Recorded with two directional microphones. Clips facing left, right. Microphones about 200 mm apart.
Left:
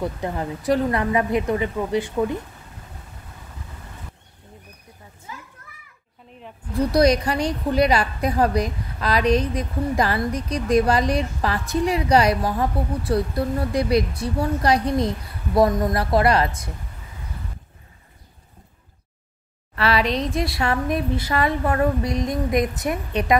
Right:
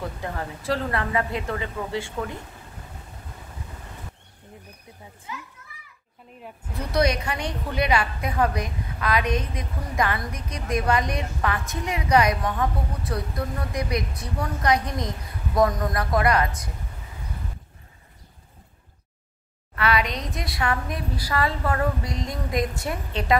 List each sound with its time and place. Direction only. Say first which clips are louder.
0.2 s a woman's voice: left 5 dB; 20° left (ahead or behind)
6.8 s a woman's voice: left 6 dB; 35° left (ahead or behind)
19.8 s a woman's voice: left 4 dB; 30° left (ahead or behind)